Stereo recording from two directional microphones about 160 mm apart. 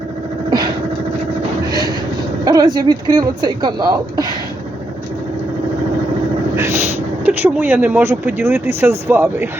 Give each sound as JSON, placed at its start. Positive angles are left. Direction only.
{"t": 2.4, "sound": "speech", "side_deg": -25}
{"t": 7.3, "sound": "speech", "side_deg": -10}